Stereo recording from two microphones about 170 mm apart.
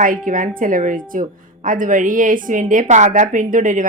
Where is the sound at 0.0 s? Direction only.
55° right (ahead or behind).